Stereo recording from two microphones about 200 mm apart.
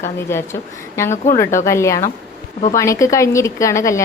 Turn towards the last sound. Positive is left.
turn(degrees=15)  # may be behind; listen again after turning